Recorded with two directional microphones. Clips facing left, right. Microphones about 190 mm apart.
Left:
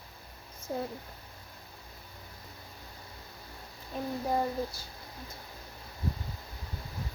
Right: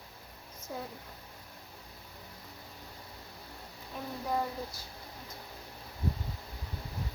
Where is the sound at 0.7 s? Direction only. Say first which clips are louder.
Left 6 dB; 35° left (ahead or behind).